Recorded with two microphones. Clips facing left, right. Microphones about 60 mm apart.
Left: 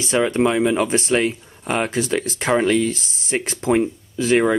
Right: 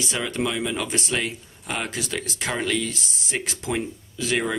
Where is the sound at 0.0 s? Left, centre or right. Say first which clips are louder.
Left 8 dB; left.